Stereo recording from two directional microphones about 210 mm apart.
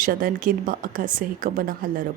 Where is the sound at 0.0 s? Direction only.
40° right (ahead or behind).